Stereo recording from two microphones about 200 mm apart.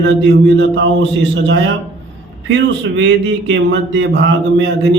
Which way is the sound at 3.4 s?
65° right (ahead or behind).